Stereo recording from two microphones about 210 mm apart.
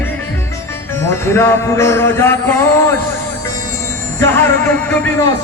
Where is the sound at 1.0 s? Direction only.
10° left (ahead or behind).